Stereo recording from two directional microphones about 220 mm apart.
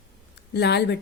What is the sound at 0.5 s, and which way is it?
Speech, 50° left (ahead or behind).